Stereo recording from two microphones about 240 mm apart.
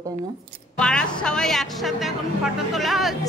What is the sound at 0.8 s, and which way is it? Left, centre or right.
Speech, centre.